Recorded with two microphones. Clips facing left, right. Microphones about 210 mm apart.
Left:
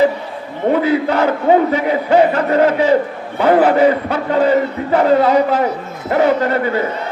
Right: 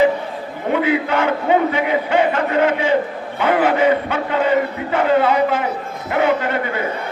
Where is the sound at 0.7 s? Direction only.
35° left (ahead or behind).